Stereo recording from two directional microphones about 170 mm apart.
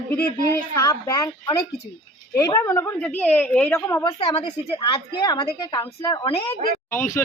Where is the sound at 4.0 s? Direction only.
30° left (ahead or behind).